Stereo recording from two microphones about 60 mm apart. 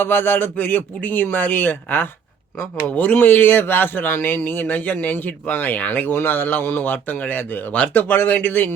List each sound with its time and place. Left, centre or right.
0.0 s speech: left